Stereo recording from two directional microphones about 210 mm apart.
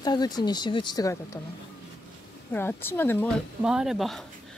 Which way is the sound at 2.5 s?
10° left (ahead or behind).